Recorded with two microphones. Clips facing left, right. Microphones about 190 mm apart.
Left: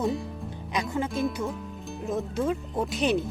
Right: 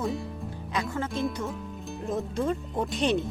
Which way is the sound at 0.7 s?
15° left (ahead or behind).